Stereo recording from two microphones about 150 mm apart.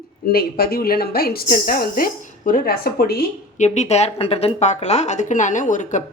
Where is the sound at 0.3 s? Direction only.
90° left.